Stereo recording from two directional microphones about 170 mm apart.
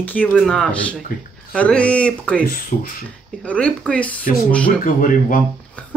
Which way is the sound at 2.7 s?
55° left (ahead or behind).